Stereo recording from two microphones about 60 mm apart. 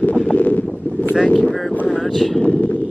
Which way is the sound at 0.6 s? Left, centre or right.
Centre.